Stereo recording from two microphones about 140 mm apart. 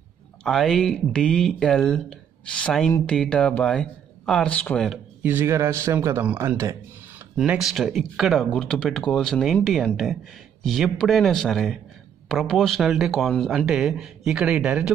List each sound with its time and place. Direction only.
0.4 s speech: centre (ahead or behind)
5.2 s a man's voice: 15° right (ahead or behind)
7.3 s speech: 5° right (ahead or behind)